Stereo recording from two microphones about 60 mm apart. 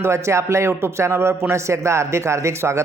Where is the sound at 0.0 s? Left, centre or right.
Right.